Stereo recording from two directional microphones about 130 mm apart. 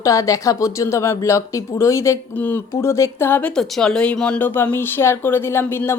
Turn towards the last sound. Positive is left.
turn(degrees=15)  # may be behind; listen again after turning